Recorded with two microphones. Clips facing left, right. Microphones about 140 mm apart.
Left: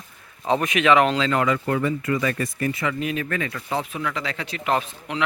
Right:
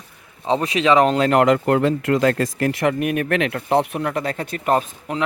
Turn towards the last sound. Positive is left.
turn(degrees=-40)  # may be behind; listen again after turning